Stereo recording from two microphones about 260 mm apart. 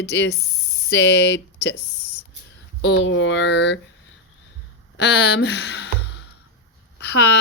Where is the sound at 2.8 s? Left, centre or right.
Left.